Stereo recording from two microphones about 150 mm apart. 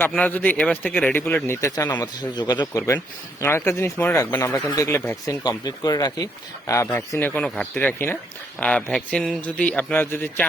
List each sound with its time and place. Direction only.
0.0 s speech: 10° left (ahead or behind)